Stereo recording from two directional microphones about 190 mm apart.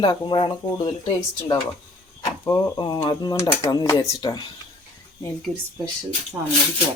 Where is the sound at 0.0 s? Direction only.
25° left (ahead or behind).